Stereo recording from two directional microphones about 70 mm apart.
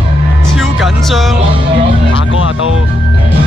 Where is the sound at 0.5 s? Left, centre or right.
Centre.